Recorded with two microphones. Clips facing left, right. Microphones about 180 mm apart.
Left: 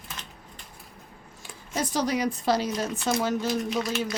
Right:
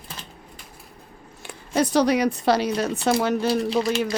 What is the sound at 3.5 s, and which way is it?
Speech, 30° right (ahead or behind).